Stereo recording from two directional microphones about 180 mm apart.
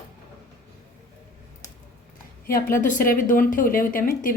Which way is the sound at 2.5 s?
45° left (ahead or behind).